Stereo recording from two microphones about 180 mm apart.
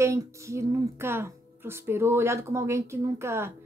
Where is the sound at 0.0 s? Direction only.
15° right (ahead or behind).